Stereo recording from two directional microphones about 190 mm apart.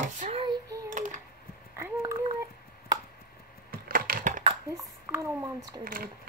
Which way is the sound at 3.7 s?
50° right (ahead or behind).